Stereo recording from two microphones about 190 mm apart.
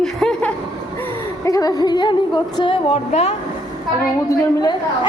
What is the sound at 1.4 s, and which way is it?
A woman's voice, 20° left (ahead or behind).